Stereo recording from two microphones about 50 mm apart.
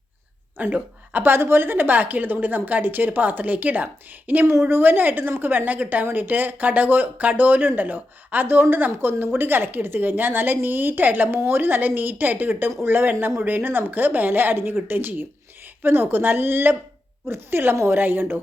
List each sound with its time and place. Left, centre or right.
0.5 s a woman's voice: right